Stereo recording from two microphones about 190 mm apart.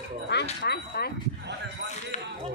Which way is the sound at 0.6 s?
55° left (ahead or behind).